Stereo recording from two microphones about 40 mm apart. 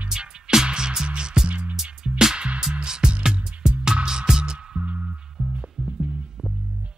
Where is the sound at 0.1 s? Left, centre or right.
Centre.